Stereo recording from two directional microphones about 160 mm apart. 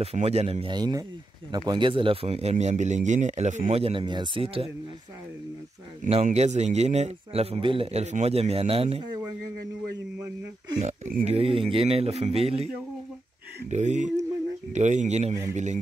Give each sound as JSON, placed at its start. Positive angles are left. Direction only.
{"t": 0.0, "sound": "speech", "side_deg": -40}
{"t": 6.2, "sound": "speech", "side_deg": -45}
{"t": 10.8, "sound": "speech", "side_deg": -50}
{"t": 11.2, "sound": "speech", "side_deg": -35}
{"t": 13.7, "sound": "speech", "side_deg": -50}